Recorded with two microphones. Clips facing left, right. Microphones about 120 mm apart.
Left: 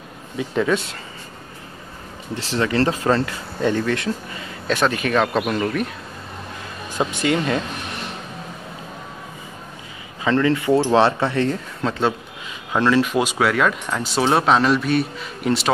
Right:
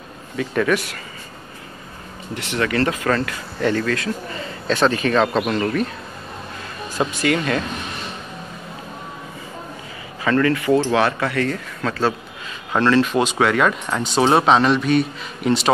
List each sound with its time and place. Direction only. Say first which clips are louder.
0.4 s speech: right 1 dB; 20° left (ahead or behind)
2.3 s speech: left 1 dB; 30° left (ahead or behind)
4.3 s speech: right 1 dB; 5° left (ahead or behind)
7.0 s speech: even; 20° left (ahead or behind)
10.2 s speech: even; 20° left (ahead or behind); by 15.7 s centre (ahead or behind)